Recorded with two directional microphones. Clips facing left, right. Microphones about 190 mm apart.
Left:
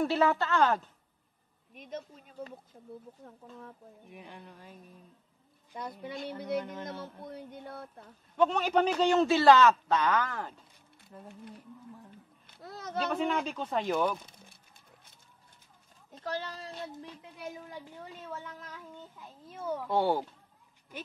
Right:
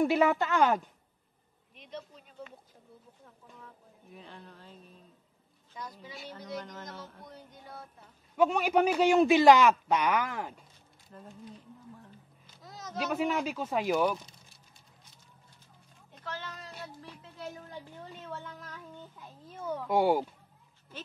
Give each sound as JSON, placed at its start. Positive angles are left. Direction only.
{"t": 0.0, "sound": "a man's voice", "side_deg": -15}
{"t": 1.7, "sound": "speech", "side_deg": 45}
{"t": 4.1, "sound": "speech", "side_deg": 15}
{"t": 5.8, "sound": "a sound", "side_deg": 60}
{"t": 8.4, "sound": "a man's voice", "side_deg": -10}
{"t": 12.4, "sound": "a sound", "side_deg": 60}
{"t": 13.1, "sound": "a man's voice", "side_deg": -5}
{"t": 16.2, "sound": "speech", "side_deg": 35}
{"t": 18.3, "sound": "speech", "side_deg": 5}
{"t": 19.9, "sound": "a man's voice", "side_deg": -10}